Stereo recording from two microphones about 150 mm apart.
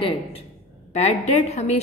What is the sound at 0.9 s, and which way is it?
Speech, 50° left (ahead or behind).